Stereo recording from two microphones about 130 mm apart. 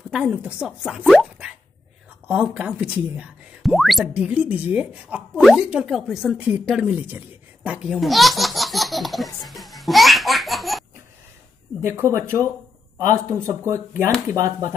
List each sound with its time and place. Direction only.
0.1 s speech: 10° right (ahead or behind)
5.3 s speech: centre (ahead or behind)
6.7 s baby laughter: 10° right (ahead or behind)
11.8 s speech: 20° right (ahead or behind)